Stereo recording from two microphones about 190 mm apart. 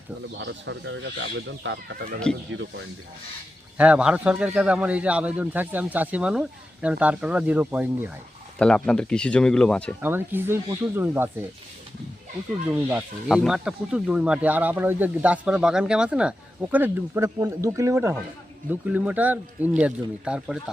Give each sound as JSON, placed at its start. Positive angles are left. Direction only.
{"t": 0.3, "sound": "speech", "side_deg": -70}
{"t": 2.5, "sound": "speech", "side_deg": -75}
{"t": 3.8, "sound": "speech", "side_deg": -5}
{"t": 8.5, "sound": "speech", "side_deg": 5}
{"t": 10.0, "sound": "speech", "side_deg": -10}
{"t": 12.7, "sound": "speech", "side_deg": -5}